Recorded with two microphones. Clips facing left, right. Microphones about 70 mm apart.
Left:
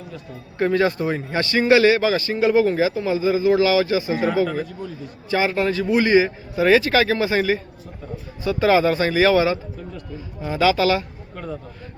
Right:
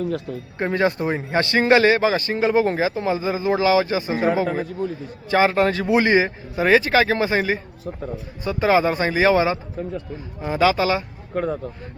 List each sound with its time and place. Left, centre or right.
0.6 s a man's voice: right
11.3 s speech: right